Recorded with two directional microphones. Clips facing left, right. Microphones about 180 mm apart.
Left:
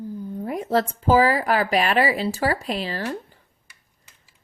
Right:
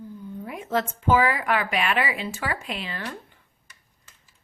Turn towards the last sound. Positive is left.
turn(degrees=35)  # may be behind; listen again after turning